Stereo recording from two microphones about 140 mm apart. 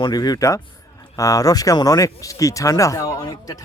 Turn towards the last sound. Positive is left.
turn(degrees=25)  # may be behind; listen again after turning